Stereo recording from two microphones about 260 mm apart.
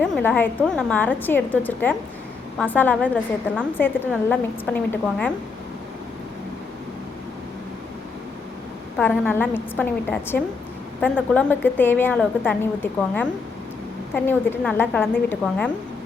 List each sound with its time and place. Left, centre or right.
0.0 s a woman's voice: centre
9.0 s a woman's voice: centre
14.3 s a woman's voice: centre